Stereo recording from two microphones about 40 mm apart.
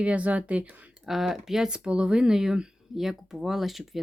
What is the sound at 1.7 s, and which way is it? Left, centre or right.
Speech, right.